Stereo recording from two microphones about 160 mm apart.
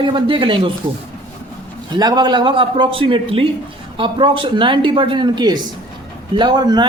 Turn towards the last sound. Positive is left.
turn(degrees=-25)  # may be behind; listen again after turning